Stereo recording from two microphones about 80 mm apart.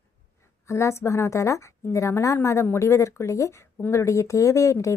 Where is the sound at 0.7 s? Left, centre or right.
Left.